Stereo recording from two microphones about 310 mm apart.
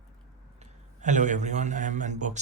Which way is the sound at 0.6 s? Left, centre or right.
Right.